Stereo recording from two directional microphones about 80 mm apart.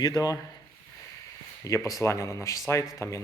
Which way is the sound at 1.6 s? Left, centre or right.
Left.